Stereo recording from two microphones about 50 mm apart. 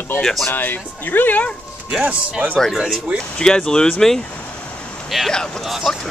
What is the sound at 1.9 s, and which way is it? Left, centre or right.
Speech, right.